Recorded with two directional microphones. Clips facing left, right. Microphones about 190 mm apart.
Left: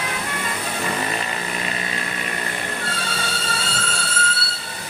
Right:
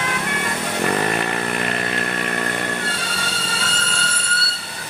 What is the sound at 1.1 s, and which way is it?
Chainsaw, 60° right (ahead or behind).